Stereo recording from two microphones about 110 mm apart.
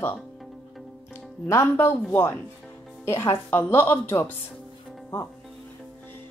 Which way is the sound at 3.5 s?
20° left (ahead or behind).